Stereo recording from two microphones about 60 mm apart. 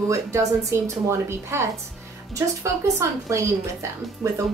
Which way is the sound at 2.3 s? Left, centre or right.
Right.